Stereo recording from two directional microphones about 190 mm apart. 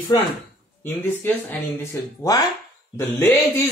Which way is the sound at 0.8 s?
10° left (ahead or behind).